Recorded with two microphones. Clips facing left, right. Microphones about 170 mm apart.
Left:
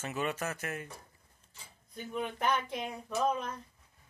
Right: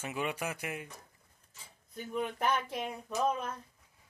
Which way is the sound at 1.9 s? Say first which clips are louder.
Right 1 dB; centre (ahead or behind).